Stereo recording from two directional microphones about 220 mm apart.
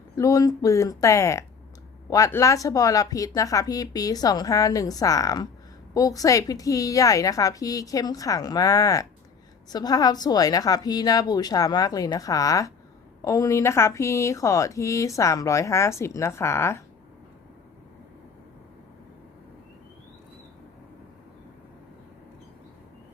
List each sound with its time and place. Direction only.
0.2 s speech: 15° left (ahead or behind)